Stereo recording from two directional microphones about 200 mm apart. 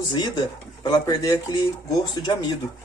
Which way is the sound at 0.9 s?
20° left (ahead or behind).